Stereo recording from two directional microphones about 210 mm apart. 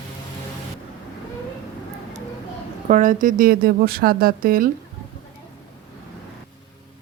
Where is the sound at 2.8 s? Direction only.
40° right (ahead or behind).